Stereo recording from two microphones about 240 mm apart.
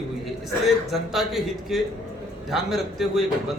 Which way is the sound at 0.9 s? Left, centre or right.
Centre.